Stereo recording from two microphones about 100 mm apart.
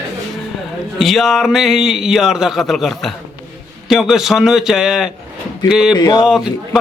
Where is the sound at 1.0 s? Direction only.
Centre (ahead or behind).